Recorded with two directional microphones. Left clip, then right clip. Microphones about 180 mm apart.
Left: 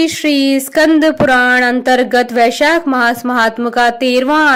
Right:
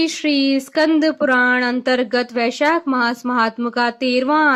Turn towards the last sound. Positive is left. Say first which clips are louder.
# left 6 dB
turn(degrees=25)  # may be behind; listen again after turning